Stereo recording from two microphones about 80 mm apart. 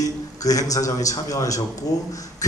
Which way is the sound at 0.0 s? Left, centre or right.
Left.